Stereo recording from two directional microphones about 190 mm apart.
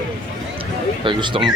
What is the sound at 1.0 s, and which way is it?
Speech, 25° right (ahead or behind).